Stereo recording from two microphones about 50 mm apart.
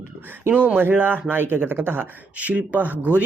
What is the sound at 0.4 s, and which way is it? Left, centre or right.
Speech, right.